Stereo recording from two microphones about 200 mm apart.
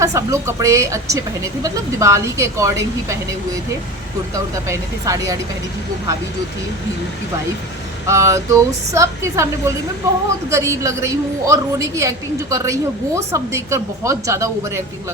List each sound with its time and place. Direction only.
0.0 s a woman's voice: 15° right (ahead or behind)
4.7 s a woman's voice: 15° right (ahead or behind)
8.0 s a woman's voice: 15° right (ahead or behind)